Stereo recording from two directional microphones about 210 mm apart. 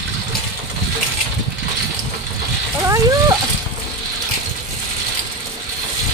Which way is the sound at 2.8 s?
15° right (ahead or behind).